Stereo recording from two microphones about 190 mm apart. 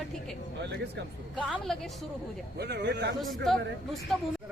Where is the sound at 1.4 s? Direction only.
5° right (ahead or behind).